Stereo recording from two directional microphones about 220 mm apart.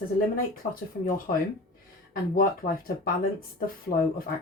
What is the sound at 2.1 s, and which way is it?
Speech, 40° left (ahead or behind).